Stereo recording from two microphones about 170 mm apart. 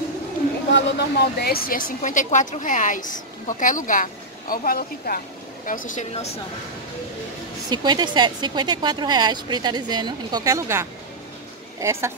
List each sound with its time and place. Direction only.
0.7 s speech: 80° left; by 1.8 s 60° left (ahead or behind)
2.0 s a woman's voice: 45° left (ahead or behind)
7.7 s a woman's voice: 25° right (ahead or behind)